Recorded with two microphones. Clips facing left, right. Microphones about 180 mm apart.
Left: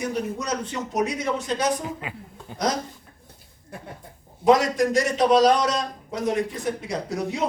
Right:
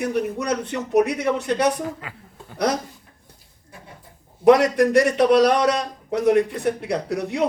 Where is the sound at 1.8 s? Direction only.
20° left (ahead or behind).